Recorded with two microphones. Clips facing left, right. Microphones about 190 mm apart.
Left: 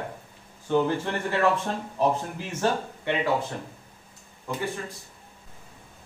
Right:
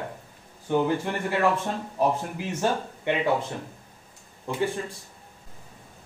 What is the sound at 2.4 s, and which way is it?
Speech, 15° right (ahead or behind).